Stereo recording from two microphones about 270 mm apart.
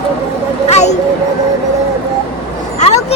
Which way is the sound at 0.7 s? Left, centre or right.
Left.